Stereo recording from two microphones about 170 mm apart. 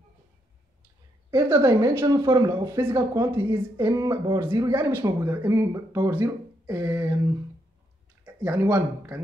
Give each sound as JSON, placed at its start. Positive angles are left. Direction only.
{"t": 1.3, "sound": "speech", "side_deg": -20}
{"t": 8.6, "sound": "speech", "side_deg": -15}